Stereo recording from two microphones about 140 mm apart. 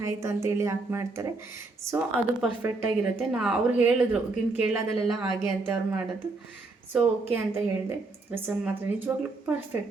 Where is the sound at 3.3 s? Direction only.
5° right (ahead or behind).